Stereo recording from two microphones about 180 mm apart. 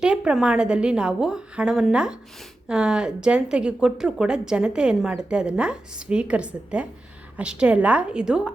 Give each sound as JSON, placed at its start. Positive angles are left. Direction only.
{"t": 0.0, "sound": "speech", "side_deg": -5}